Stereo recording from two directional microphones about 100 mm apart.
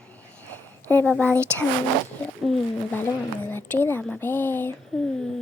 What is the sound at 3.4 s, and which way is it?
Speech, 20° left (ahead or behind).